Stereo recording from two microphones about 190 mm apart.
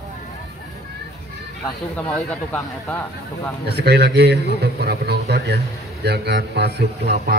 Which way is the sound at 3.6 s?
60° right (ahead or behind).